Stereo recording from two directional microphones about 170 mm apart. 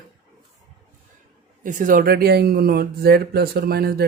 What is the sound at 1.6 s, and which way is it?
Speech, 50° right (ahead or behind).